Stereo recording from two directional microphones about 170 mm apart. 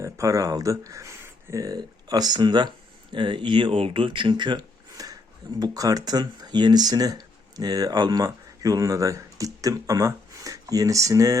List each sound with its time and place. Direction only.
0.0 s speech: 20° right (ahead or behind)